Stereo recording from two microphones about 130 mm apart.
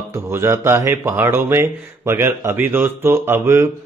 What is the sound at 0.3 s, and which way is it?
Speech, 20° right (ahead or behind).